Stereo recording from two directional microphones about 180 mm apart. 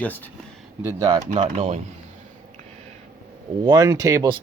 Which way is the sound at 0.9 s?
20° right (ahead or behind).